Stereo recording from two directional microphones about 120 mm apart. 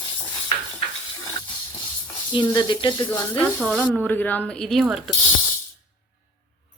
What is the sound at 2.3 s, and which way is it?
Speech, 40° left (ahead or behind).